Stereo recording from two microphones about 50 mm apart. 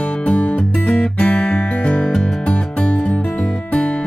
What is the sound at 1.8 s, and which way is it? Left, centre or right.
Music, left.